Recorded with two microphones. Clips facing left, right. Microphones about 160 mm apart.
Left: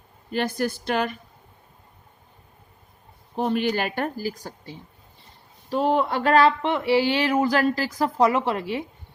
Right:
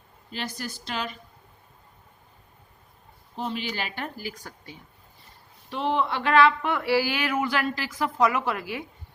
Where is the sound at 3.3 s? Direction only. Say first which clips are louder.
Left 8 dB; 55° left (ahead or behind); by 6.5 s 35° left (ahead or behind).